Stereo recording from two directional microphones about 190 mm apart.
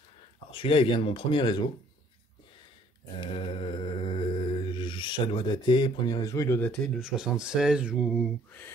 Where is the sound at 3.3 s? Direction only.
25° left (ahead or behind); by 6.9 s 10° left (ahead or behind).